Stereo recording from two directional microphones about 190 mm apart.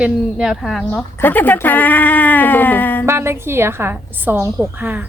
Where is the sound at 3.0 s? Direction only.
15° right (ahead or behind).